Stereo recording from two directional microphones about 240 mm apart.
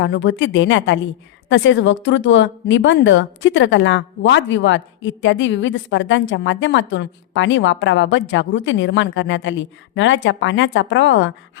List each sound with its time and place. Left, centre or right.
0.0 s a woman's voice: left